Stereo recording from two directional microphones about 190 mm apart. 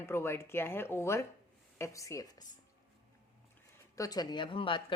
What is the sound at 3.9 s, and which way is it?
Speech, 20° left (ahead or behind).